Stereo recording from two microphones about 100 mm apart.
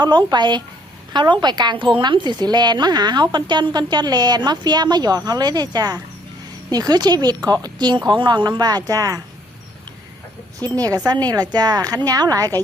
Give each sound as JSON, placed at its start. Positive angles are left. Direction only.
{"t": 0.0, "sound": "a woman's voice", "side_deg": -50}
{"t": 10.6, "sound": "a woman's voice", "side_deg": -40}